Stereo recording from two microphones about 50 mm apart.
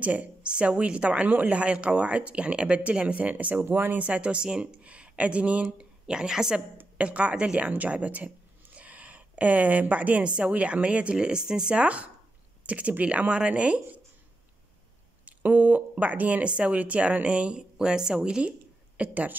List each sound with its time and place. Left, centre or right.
0.0 s a woman's voice: right
3.6 s speech: right
4.0 s a woman's voice: right
7.0 s a woman's voice: right
11.7 s a woman's voice: right
15.2 s a woman's voice: right
18.9 s speech: right